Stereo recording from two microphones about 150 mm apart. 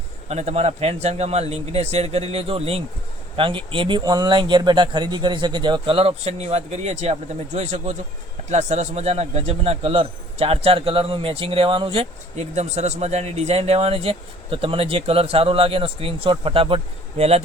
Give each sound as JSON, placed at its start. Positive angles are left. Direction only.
{"t": 0.3, "sound": "a man's voice", "side_deg": -50}